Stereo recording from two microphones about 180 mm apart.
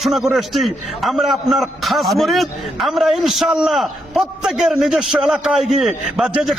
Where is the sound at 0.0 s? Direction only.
Centre (ahead or behind).